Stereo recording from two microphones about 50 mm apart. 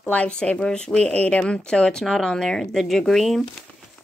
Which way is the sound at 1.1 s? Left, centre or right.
Left.